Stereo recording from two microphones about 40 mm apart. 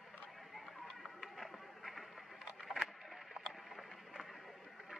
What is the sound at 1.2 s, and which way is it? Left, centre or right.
Run, centre.